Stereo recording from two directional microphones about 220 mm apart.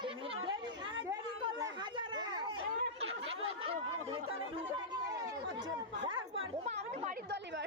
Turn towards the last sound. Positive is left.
turn(degrees=-30)  # may be behind; listen again after turning